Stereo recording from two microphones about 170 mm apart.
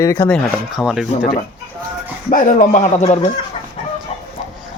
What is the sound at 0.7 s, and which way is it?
Speech, 5° right (ahead or behind).